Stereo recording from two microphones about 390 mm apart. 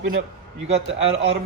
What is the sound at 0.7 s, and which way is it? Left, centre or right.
Speech, centre.